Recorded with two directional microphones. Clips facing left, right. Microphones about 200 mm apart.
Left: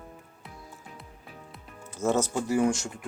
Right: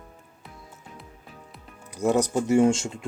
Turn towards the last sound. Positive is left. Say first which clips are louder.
# right 5 dB
turn(degrees=-25)  # may be behind; listen again after turning